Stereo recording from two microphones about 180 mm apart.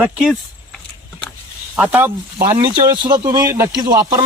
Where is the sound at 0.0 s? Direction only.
5° right (ahead or behind).